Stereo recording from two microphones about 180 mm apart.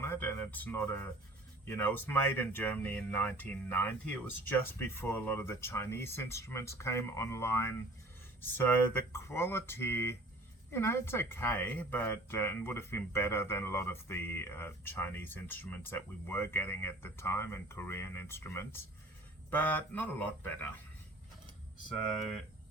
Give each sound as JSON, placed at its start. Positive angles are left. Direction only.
{"t": 0.0, "sound": "speech", "side_deg": 15}